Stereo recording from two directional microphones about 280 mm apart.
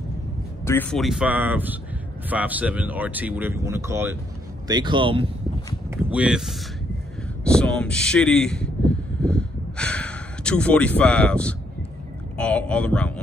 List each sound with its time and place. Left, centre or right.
0.7 s speech: centre
5.9 s speech: centre
7.4 s a sound: centre
12.4 s speech: centre